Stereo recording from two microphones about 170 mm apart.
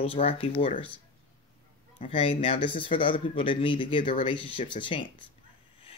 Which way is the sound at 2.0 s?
35° left (ahead or behind).